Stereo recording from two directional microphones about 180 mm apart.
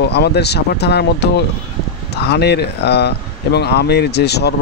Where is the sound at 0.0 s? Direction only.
65° left (ahead or behind).